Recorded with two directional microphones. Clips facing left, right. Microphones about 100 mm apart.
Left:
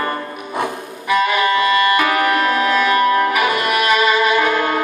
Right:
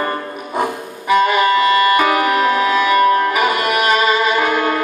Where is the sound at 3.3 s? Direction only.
25° right (ahead or behind).